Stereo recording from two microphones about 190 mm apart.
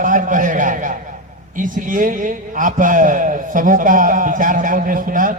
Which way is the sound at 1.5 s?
45° right (ahead or behind).